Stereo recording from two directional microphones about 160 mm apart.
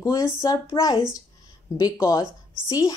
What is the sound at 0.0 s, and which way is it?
Speech, 25° left (ahead or behind).